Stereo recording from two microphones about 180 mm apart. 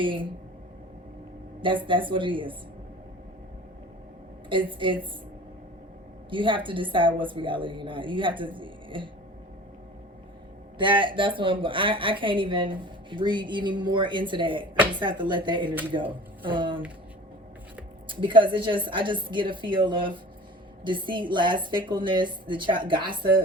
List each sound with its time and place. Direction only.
0.0 s speech: 30° right (ahead or behind)
1.6 s speech: 30° right (ahead or behind)
4.4 s speech: 30° right (ahead or behind)
6.3 s speech: 30° right (ahead or behind)
10.8 s speech: 25° right (ahead or behind)
18.1 s speech: 25° right (ahead or behind)